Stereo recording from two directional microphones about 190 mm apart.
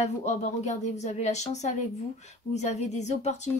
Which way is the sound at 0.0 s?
35° left (ahead or behind).